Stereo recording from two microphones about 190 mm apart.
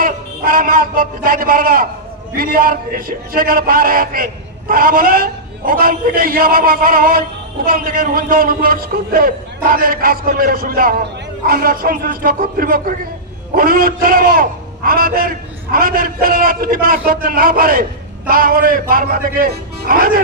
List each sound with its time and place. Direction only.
0.0 s a man's voice: 50° right (ahead or behind)